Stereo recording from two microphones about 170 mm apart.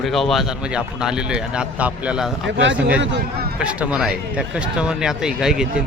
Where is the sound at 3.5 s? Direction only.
5° right (ahead or behind).